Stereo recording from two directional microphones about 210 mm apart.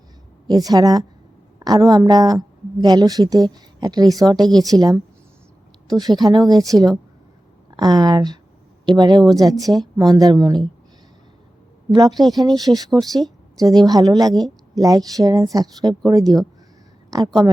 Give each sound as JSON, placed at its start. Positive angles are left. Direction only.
{"t": 0.4, "sound": "a woman's voice", "side_deg": -20}
{"t": 11.9, "sound": "a woman's voice", "side_deg": -20}
{"t": 12.5, "sound": "speech", "side_deg": 0}
{"t": 13.6, "sound": "a woman's voice", "side_deg": -15}